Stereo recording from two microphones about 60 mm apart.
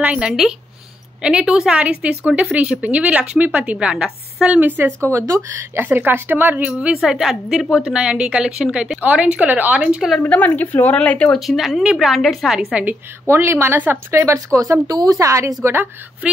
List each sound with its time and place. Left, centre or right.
0.3 s a woman's voice: centre
1.8 s speech: right
3.7 s speech: centre
4.5 s speech: right
5.0 s speech: right
5.8 s speech: right
7.0 s speech: centre
9.0 s speech: right
9.8 s speech: centre
10.2 s a woman's voice: left
11.0 s a woman's voice: centre
11.3 s a woman's voice: centre
13.3 s a woman's voice: right
14.1 s speech: right